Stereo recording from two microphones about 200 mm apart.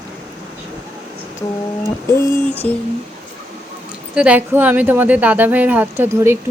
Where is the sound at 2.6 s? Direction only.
5° left (ahead or behind).